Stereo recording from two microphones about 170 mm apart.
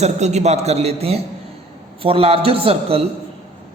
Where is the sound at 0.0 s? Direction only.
40° right (ahead or behind).